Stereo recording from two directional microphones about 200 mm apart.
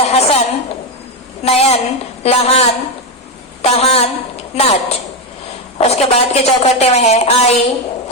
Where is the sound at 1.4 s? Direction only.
30° left (ahead or behind).